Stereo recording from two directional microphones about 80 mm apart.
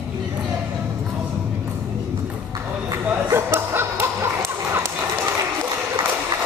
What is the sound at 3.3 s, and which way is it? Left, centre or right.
Music, right.